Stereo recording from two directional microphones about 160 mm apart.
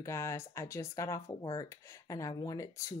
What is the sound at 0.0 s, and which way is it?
Speech, 20° left (ahead or behind).